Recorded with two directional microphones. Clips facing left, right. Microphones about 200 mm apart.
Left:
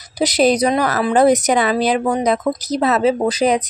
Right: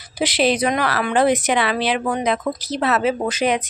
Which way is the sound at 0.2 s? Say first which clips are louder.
Left 4 dB; 40° left (ahead or behind).